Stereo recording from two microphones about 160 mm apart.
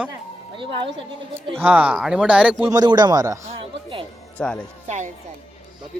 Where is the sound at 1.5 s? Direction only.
10° right (ahead or behind).